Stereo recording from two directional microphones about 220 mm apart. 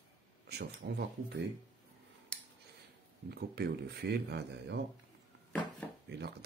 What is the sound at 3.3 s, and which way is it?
Speech, 45° right (ahead or behind).